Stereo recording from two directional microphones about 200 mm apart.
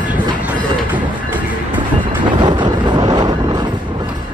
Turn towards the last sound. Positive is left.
turn(degrees=-20)  # may be behind; listen again after turning